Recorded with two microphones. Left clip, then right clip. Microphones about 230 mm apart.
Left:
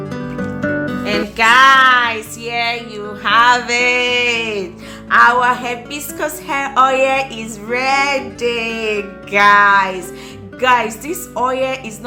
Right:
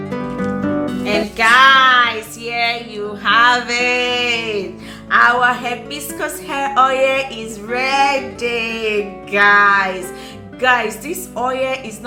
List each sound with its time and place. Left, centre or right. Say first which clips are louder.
1.0 s music: left 1 dB; left
5.0 s a woman's voice: left 2 dB; left